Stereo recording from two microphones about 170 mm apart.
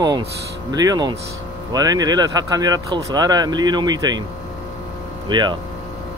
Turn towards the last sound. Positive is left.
turn(degrees=-25)  # may be behind; listen again after turning